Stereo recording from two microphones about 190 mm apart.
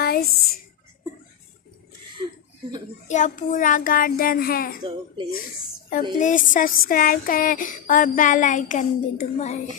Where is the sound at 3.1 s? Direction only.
40° left (ahead or behind).